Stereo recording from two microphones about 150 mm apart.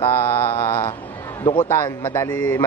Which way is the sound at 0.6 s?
15° left (ahead or behind).